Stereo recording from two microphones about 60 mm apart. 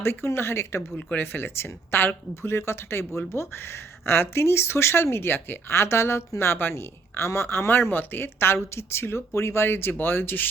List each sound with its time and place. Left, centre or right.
0.0 s speech: left
0.9 s speech: left